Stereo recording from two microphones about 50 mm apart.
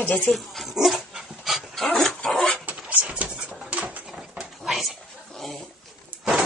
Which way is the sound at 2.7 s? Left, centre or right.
Right.